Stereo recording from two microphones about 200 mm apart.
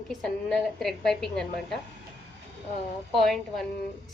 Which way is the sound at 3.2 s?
Centre (ahead or behind).